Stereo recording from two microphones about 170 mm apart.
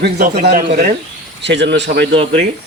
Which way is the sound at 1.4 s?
90° right.